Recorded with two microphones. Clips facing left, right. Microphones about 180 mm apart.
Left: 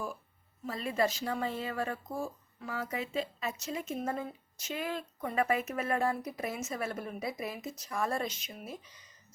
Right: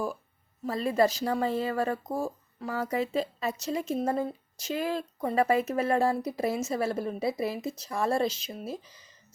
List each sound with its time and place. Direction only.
0.6 s speech: 40° right (ahead or behind)